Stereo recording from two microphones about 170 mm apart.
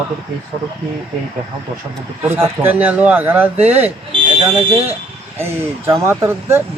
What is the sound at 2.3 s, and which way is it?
Speech, 15° right (ahead or behind).